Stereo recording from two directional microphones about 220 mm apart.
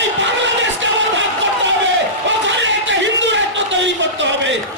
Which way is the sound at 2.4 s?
55° right (ahead or behind).